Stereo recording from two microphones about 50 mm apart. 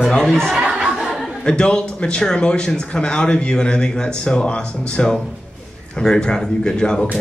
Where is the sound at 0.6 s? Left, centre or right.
Centre.